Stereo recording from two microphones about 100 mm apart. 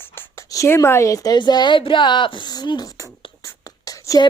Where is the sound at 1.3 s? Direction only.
45° left (ahead or behind).